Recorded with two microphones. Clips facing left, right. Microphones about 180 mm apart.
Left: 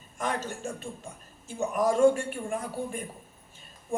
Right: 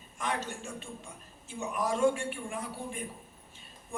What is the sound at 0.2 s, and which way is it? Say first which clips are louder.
A man's voice: left 3 dB; 45° left (ahead or behind).